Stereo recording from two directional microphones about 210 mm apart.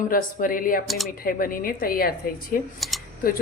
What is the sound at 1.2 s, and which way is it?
A woman's voice, 40° left (ahead or behind).